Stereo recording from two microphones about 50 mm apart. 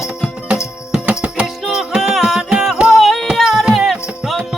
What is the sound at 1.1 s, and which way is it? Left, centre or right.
Music, right.